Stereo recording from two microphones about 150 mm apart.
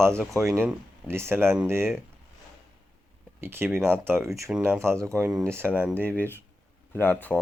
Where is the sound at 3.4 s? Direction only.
15° right (ahead or behind).